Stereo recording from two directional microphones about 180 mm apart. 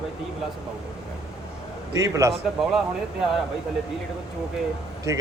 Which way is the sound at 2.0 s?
15° right (ahead or behind).